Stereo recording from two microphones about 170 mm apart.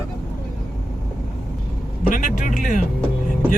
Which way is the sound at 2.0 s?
50° left (ahead or behind).